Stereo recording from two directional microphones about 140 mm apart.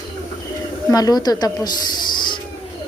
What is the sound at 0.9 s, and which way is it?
Speech, 25° left (ahead or behind).